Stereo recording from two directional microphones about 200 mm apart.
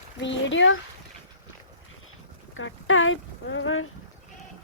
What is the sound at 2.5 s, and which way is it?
Speech, 80° left.